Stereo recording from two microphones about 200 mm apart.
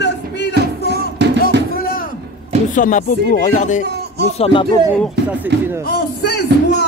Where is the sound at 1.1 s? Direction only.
60° right (ahead or behind).